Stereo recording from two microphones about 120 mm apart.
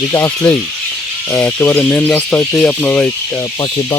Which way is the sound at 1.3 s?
15° left (ahead or behind).